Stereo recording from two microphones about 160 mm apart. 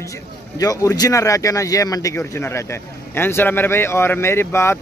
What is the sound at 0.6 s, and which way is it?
Speech, 25° left (ahead or behind).